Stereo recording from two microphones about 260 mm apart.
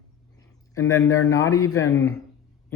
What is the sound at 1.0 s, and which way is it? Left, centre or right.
Speech, left.